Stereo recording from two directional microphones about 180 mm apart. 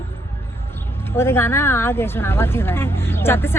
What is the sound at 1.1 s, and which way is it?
A woman's voice, 15° left (ahead or behind).